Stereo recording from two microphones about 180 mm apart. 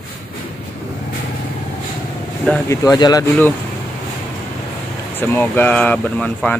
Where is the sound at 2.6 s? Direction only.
20° left (ahead or behind).